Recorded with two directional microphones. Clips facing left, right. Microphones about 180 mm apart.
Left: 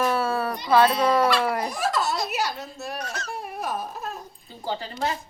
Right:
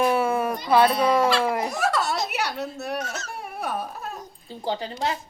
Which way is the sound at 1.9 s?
65° right (ahead or behind).